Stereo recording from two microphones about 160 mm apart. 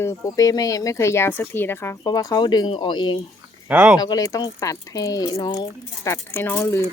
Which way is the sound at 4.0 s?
25° left (ahead or behind).